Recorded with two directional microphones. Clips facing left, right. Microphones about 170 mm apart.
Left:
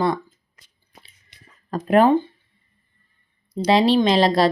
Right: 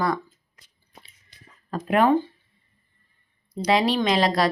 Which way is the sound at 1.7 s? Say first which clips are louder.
Left 5 dB; 35° left (ahead or behind).